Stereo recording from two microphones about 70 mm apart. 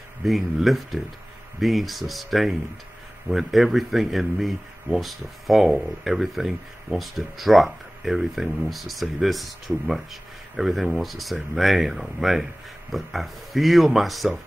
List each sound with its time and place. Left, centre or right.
0.2 s speech: centre